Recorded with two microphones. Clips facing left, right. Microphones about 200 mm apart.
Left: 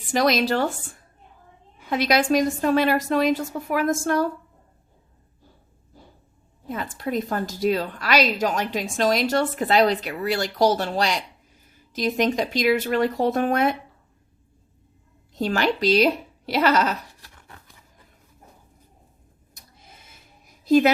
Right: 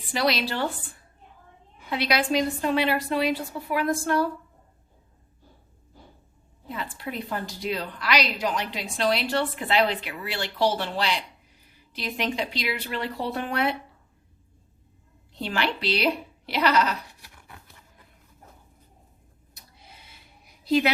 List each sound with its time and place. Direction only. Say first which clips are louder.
0.1 s a woman's voice: left 5 dB; 45° left (ahead or behind)
1.9 s a woman's voice: left 5 dB; 45° left (ahead or behind)
6.7 s a woman's voice: left 6 dB; 45° left (ahead or behind)
15.3 s speech: left 5 dB; 45° left (ahead or behind)
19.5 s a sound: left 1 dB; 45° left (ahead or behind)